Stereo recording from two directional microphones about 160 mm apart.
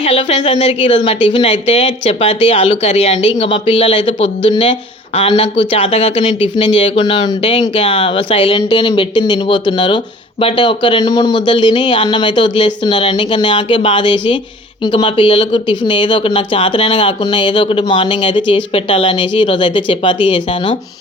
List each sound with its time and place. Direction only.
0.0 s speech: 35° left (ahead or behind)